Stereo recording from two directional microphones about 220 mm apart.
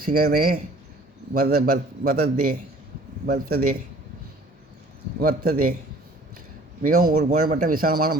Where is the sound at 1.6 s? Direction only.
40° right (ahead or behind).